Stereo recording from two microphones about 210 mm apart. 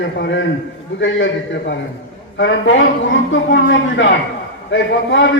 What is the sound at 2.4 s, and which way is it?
A man's voice, 60° left (ahead or behind).